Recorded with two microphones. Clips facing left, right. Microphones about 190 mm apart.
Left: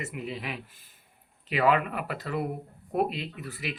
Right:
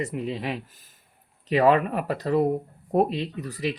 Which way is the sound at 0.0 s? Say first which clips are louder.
Right 7 dB; 35° right (ahead or behind).